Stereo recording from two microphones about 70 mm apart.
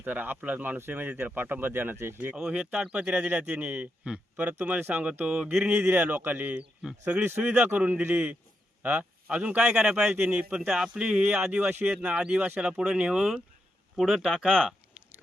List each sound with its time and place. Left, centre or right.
0.0 s speech: right
2.3 s speech: centre
5.2 s speech: centre
5.5 s speech: centre
5.7 s speech: right; by 14.7 s centre